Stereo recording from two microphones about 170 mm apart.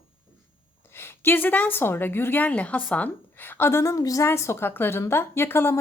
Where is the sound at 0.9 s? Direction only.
15° left (ahead or behind).